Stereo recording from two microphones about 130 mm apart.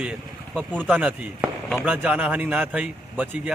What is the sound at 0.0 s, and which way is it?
Speech, 10° right (ahead or behind).